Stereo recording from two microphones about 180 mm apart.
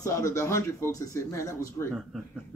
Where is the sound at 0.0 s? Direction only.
15° left (ahead or behind).